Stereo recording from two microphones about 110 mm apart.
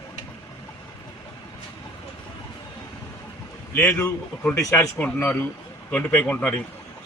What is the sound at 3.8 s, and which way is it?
A man's voice, 25° left (ahead or behind).